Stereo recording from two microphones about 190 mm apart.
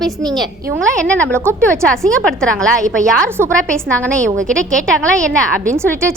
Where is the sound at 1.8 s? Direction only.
5° left (ahead or behind).